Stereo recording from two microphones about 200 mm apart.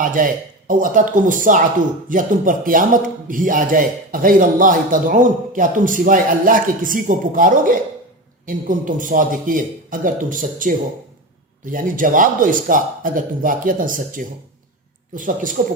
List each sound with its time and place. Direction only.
0.0 s speech: 45° right (ahead or behind)